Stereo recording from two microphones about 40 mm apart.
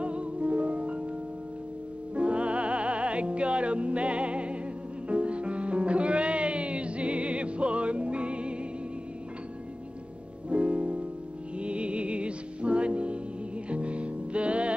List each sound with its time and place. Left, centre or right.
0.0 s music: right
2.1 s music: right
10.5 s music: right